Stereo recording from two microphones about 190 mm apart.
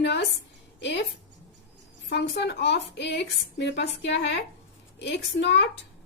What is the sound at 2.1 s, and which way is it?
A woman's voice, 60° left (ahead or behind).